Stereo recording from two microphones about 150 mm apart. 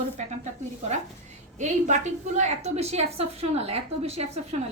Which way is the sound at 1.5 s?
55° right (ahead or behind).